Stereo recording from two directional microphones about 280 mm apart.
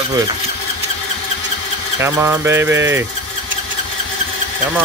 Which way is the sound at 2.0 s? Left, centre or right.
Centre.